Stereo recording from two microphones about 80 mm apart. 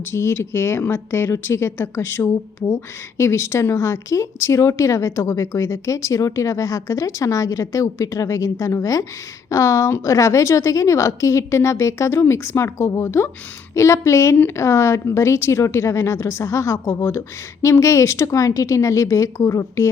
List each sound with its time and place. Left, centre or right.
0.1 s a woman's voice: left
16.7 s a woman's voice: left